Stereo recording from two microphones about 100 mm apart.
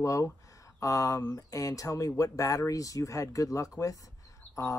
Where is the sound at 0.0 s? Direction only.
35° left (ahead or behind).